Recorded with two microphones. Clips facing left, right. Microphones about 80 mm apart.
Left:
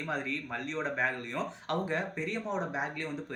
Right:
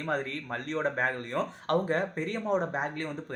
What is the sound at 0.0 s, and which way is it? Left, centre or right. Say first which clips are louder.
Speech: right 3 dB; right.